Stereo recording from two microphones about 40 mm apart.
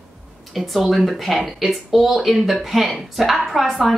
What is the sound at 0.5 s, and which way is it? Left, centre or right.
A woman's voice, centre.